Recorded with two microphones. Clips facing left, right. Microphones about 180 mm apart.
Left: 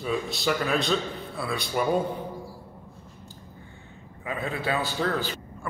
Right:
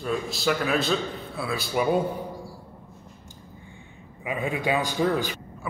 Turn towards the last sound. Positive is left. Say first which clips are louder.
# right 3 dB
turn(degrees=-15)  # may be behind; listen again after turning